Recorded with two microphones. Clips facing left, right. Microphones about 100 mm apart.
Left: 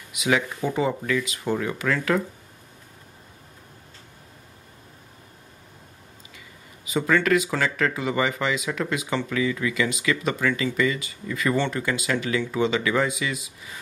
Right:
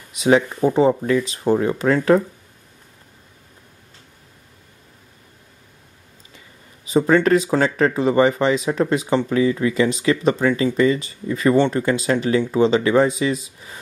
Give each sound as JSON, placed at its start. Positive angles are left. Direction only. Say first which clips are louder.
{"t": 0.2, "sound": "speech", "louder": "right 8 dB", "side_deg": -35}
{"t": 6.9, "sound": "speech", "louder": "right 6 dB", "side_deg": -30}